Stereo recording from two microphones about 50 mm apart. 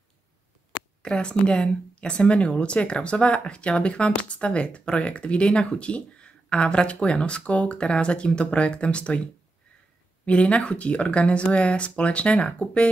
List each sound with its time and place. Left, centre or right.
1.0 s speech: centre